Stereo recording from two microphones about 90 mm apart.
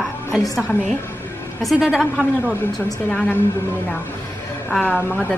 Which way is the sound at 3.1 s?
15° left (ahead or behind).